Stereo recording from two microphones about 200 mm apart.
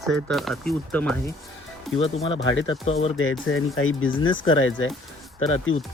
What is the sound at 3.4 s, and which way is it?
Speech, 90° left.